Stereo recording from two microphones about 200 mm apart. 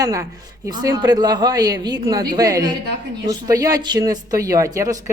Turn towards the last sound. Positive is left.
turn(degrees=-15)  # may be behind; listen again after turning